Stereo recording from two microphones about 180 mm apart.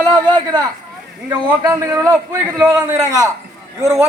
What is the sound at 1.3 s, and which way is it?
A man's voice, 15° right (ahead or behind).